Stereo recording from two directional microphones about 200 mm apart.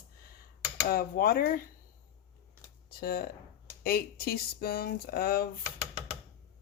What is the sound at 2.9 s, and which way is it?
Speech, 50° left (ahead or behind).